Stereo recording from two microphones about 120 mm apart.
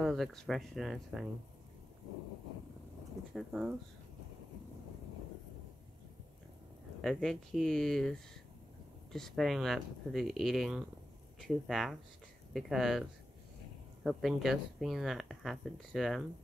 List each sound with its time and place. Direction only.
0.0 s speech: centre (ahead or behind)
3.3 s speech: 10° right (ahead or behind)
7.0 s speech: 5° left (ahead or behind)
14.0 s speech: centre (ahead or behind)